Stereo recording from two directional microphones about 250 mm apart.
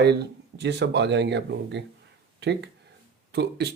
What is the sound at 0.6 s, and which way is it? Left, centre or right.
Speech, right.